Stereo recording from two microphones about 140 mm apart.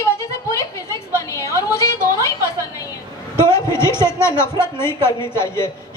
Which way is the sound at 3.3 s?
20° left (ahead or behind).